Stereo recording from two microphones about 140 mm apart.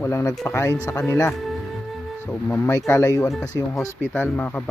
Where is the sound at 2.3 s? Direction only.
10° left (ahead or behind).